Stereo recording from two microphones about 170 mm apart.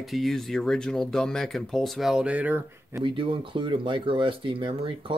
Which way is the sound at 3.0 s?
30° right (ahead or behind).